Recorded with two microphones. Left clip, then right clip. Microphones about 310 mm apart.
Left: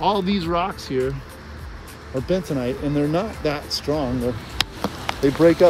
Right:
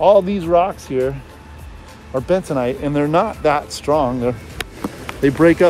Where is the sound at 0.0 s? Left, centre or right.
Centre.